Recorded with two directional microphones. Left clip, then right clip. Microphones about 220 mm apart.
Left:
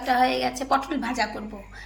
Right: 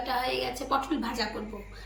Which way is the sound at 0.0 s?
15° left (ahead or behind).